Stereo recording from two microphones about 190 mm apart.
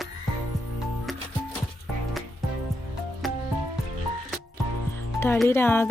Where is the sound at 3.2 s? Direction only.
Centre (ahead or behind).